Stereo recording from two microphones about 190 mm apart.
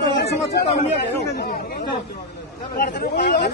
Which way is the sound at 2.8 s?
60° left (ahead or behind).